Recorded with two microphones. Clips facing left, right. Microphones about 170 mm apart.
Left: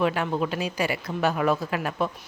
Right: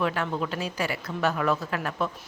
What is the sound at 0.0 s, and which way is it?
A woman's voice, 15° left (ahead or behind).